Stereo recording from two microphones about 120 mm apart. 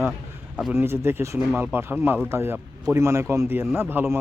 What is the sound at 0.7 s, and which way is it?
Speech, 20° right (ahead or behind).